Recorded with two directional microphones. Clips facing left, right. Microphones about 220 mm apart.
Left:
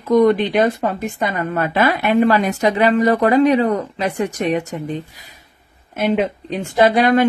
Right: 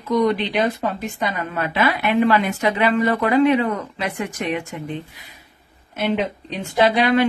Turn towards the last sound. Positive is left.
turn(degrees=45)  # may be behind; listen again after turning